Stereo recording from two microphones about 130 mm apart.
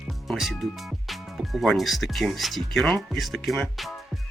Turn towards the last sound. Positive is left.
turn(degrees=0)  # may be behind; listen again after turning